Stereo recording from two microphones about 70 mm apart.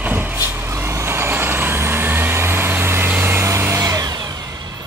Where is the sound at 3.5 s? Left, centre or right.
Right.